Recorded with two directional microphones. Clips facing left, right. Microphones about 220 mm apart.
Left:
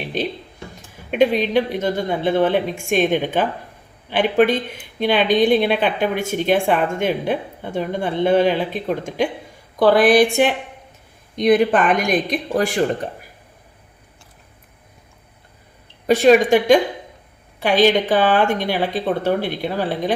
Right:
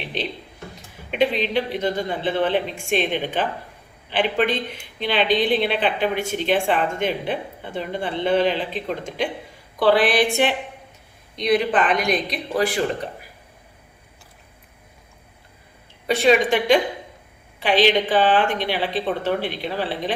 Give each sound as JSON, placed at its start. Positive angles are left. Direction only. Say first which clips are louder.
{"t": 0.1, "sound": "a woman's voice", "louder": "left 5 dB", "side_deg": 45}
{"t": 7.8, "sound": "a woman's voice", "louder": "left 5 dB", "side_deg": 45}
{"t": 16.0, "sound": "a woman's voice", "louder": "left 5 dB", "side_deg": 45}